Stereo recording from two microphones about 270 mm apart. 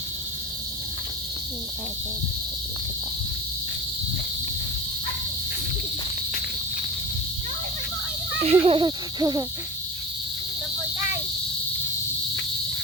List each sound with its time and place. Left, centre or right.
8.4 s speech: right